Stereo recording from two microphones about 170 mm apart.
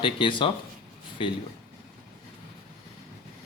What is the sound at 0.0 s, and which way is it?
Speech, 30° left (ahead or behind).